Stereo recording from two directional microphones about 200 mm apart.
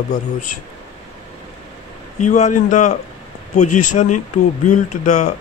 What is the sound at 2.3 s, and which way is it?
Speech, 35° left (ahead or behind).